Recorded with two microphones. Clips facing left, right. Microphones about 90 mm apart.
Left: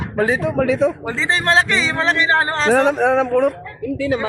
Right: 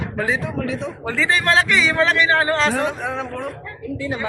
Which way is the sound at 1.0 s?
25° left (ahead or behind).